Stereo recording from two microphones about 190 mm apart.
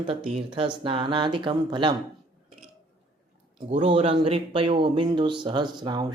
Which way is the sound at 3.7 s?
35° right (ahead or behind).